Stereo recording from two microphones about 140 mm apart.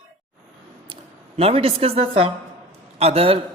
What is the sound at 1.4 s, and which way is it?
A man's voice, 45° right (ahead or behind).